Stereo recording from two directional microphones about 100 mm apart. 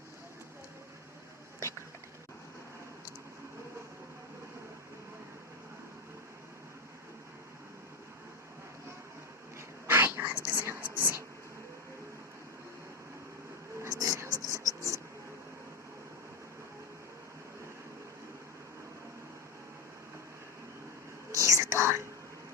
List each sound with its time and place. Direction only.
9.6 s whispering: 25° right (ahead or behind)
13.7 s a sound: 30° right (ahead or behind)
21.3 s whispering: 30° right (ahead or behind)